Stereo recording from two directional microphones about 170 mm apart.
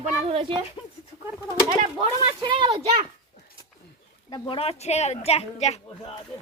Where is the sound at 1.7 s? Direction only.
40° right (ahead or behind).